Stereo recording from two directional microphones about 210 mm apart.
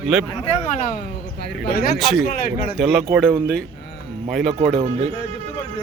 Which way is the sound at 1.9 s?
Centre (ahead or behind).